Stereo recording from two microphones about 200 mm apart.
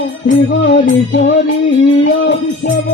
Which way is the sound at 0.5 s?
65° left (ahead or behind).